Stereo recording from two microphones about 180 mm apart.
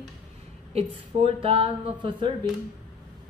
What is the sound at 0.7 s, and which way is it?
Speech, 35° right (ahead or behind).